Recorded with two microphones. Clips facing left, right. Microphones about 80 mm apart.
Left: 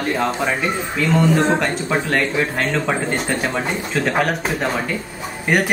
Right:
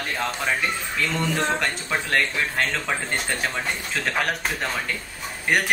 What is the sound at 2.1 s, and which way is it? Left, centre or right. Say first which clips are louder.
A man's voice: left 5 dB; centre.